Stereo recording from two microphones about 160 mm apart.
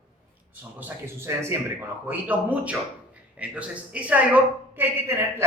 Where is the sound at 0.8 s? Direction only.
15° right (ahead or behind).